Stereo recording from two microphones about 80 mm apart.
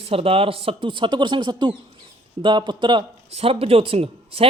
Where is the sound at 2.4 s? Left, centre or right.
Right.